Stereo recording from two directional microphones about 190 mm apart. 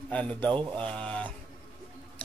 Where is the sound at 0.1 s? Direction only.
5° left (ahead or behind).